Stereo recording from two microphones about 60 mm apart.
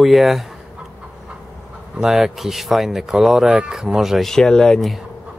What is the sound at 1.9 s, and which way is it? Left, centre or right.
Speech, centre.